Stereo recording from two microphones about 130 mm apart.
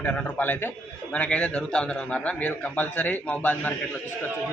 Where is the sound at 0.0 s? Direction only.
10° left (ahead or behind).